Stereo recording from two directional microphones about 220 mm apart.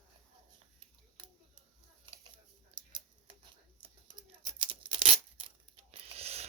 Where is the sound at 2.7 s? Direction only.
25° right (ahead or behind).